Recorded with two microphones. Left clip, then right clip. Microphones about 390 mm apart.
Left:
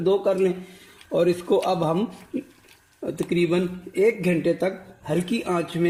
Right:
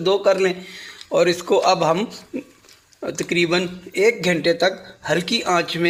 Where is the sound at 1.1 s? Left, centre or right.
Right.